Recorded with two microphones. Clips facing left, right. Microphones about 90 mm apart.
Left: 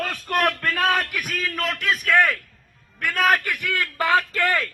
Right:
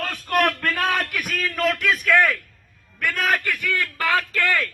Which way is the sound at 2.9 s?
Centre (ahead or behind).